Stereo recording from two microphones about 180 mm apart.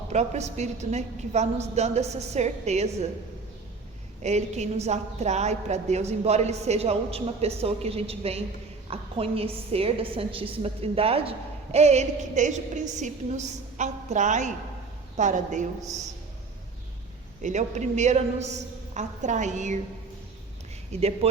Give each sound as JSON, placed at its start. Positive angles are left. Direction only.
{"t": 0.1, "sound": "a woman's voice", "side_deg": -40}
{"t": 4.2, "sound": "a woman's voice", "side_deg": -40}
{"t": 17.4, "sound": "a woman's voice", "side_deg": -40}
{"t": 20.9, "sound": "a woman's voice", "side_deg": -35}